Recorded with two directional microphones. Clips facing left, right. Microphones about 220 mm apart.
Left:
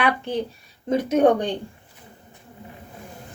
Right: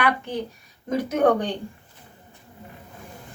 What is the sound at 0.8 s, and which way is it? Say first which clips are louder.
Speech: left 3 dB; 25° left (ahead or behind).